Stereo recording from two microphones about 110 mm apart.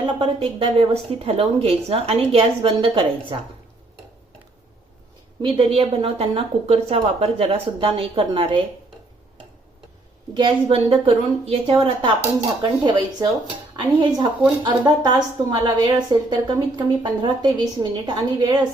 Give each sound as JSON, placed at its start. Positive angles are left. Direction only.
{"t": 0.0, "sound": "a woman's voice", "side_deg": -50}
{"t": 5.4, "sound": "a woman's voice", "side_deg": -55}
{"t": 10.3, "sound": "a woman's voice", "side_deg": -45}
{"t": 10.8, "sound": "a woman's voice", "side_deg": -60}
{"t": 12.8, "sound": "a woman's voice", "side_deg": -40}